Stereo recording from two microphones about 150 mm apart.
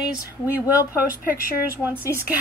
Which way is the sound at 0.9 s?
15° right (ahead or behind).